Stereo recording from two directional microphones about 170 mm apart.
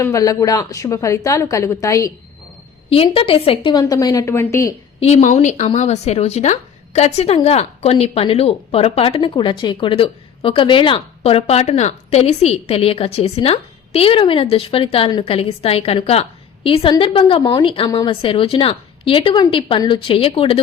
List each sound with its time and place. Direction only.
0.0 s a woman's voice: 20° left (ahead or behind)
2.9 s a woman's voice: 35° left (ahead or behind); by 4.7 s 15° left (ahead or behind)
4.9 s speech: 40° left (ahead or behind)